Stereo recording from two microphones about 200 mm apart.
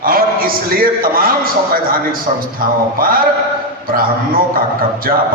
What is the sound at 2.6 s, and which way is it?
A man's voice, 45° right (ahead or behind).